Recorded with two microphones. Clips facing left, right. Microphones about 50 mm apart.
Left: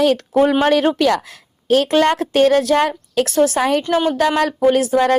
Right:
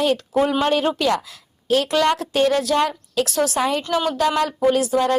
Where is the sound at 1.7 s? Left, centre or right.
Left.